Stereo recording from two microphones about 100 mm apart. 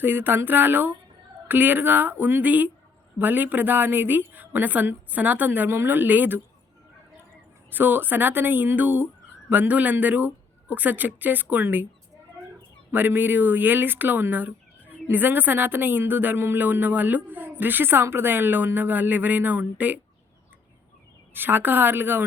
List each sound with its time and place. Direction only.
0.0 s a woman's voice: 20° right (ahead or behind)
7.7 s a woman's voice: 20° right (ahead or behind)
12.9 s a woman's voice: 20° right (ahead or behind)
21.3 s a woman's voice: 20° right (ahead or behind)